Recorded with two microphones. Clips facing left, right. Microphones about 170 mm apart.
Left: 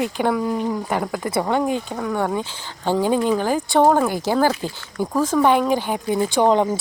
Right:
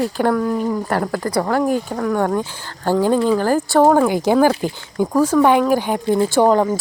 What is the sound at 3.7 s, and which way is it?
Speech, 5° right (ahead or behind).